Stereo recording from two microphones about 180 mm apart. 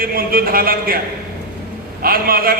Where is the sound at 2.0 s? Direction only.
55° right (ahead or behind).